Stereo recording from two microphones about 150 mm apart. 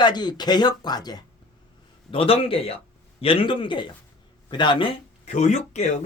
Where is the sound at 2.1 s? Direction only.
40° left (ahead or behind).